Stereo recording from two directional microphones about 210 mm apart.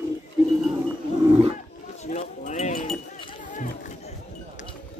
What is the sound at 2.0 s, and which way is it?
Chink, 35° left (ahead or behind).